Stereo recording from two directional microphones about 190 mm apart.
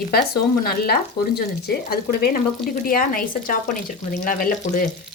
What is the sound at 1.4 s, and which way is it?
Speech, 55° left (ahead or behind).